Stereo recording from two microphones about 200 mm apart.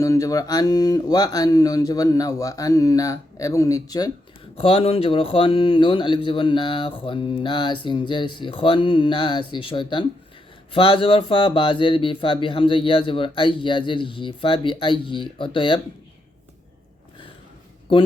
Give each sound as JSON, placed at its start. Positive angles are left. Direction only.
{"t": 0.0, "sound": "speech", "side_deg": 15}
{"t": 4.5, "sound": "speech", "side_deg": 30}